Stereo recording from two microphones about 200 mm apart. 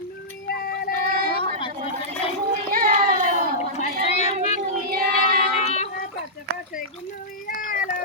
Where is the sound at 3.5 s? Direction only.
35° left (ahead or behind).